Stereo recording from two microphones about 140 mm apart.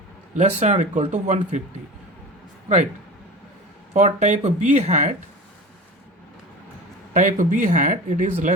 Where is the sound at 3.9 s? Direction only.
55° right (ahead or behind).